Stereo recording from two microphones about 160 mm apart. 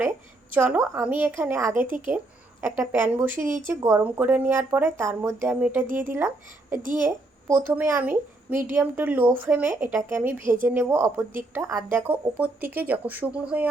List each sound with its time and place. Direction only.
0.5 s a woman's voice: 10° right (ahead or behind)